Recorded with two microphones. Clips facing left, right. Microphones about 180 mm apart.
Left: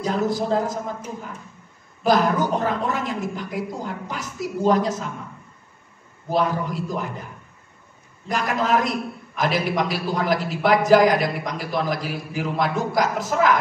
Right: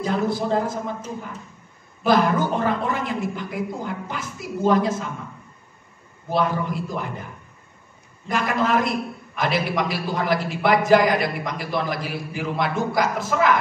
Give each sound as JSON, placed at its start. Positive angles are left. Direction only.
{"t": 0.0, "sound": "a man's voice", "side_deg": 40}
{"t": 2.0, "sound": "a woman's voice", "side_deg": 40}
{"t": 6.3, "sound": "a man's voice", "side_deg": 40}
{"t": 8.3, "sound": "a man's voice", "side_deg": 40}